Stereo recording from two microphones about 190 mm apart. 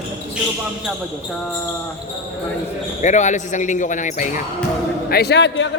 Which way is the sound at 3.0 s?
40° left (ahead or behind).